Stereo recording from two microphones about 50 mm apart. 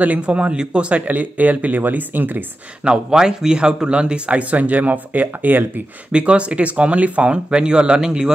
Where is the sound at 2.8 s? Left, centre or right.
Centre; by 5.8 s right.